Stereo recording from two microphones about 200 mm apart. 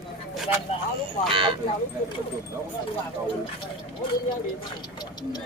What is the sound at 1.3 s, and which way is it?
Speech, 25° right (ahead or behind).